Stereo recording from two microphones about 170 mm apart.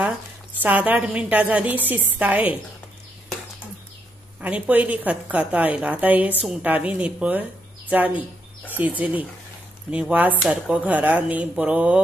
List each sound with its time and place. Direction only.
0.6 s a woman's voice: 10° right (ahead or behind)
4.4 s a woman's voice: 10° right (ahead or behind)